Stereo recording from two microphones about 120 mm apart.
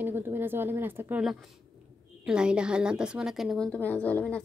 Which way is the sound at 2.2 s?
5° right (ahead or behind).